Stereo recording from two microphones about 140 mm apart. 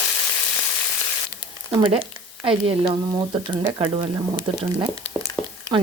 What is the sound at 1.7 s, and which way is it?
Speech, 40° right (ahead or behind).